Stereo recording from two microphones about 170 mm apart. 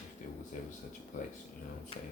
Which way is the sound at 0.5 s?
50° left (ahead or behind).